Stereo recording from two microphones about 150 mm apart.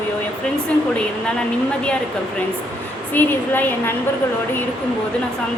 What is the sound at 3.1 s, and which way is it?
Speech, 15° left (ahead or behind).